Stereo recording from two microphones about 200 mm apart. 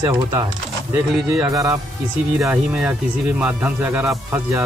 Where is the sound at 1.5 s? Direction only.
15° right (ahead or behind).